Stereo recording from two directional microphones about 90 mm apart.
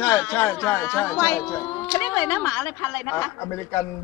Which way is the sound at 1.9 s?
35° left (ahead or behind).